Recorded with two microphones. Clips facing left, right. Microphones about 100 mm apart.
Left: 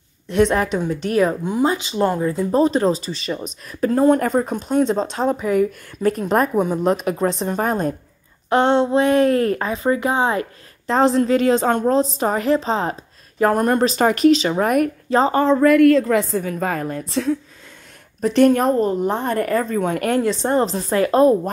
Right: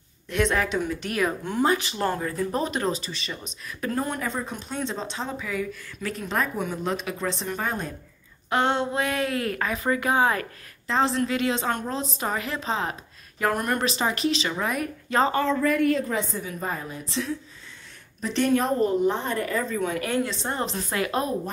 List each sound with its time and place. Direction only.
0.3 s speech: 35° left (ahead or behind)
1.4 s speech: 15° left (ahead or behind)
2.2 s speech: 30° left (ahead or behind)
10.9 s speech: 40° left (ahead or behind)
13.9 s a woman's voice: 45° left (ahead or behind)
15.6 s a woman's voice: 80° left
16.4 s a woman's voice: 75° left (ahead or behind)
16.8 s a woman's voice: 50° left (ahead or behind)